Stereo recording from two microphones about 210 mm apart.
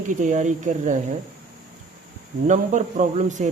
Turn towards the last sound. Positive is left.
turn(degrees=-35)  # may be behind; listen again after turning